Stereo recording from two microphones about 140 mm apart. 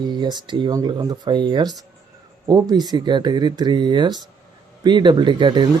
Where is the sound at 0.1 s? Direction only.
30° right (ahead or behind).